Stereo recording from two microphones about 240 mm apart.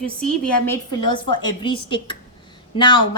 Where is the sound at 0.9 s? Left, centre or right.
Centre.